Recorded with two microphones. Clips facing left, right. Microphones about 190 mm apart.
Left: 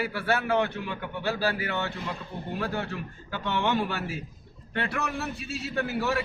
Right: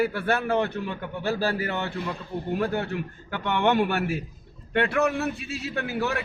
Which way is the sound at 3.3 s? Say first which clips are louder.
Right 4 dB; 60° right (ahead or behind).